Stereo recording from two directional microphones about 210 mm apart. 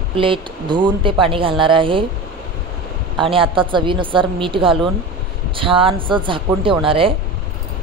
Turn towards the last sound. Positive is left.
turn(degrees=-25)  # may be behind; listen again after turning